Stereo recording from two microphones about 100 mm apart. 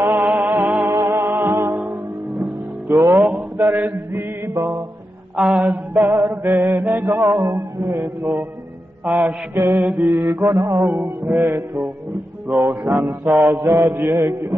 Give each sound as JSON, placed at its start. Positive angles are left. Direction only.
{"t": 0.2, "sound": "music", "side_deg": -15}
{"t": 3.2, "sound": "mantra", "side_deg": -10}
{"t": 3.5, "sound": "music", "side_deg": -20}
{"t": 5.3, "sound": "mantra", "side_deg": -10}
{"t": 5.9, "sound": "music", "side_deg": -25}